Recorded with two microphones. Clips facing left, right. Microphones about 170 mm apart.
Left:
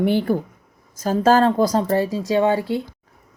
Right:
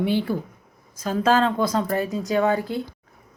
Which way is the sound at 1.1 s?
40° left (ahead or behind).